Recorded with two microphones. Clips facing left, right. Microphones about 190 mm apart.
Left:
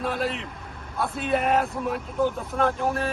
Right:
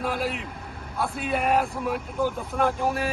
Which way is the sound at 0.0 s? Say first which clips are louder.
Left 1 dB; centre (ahead or behind).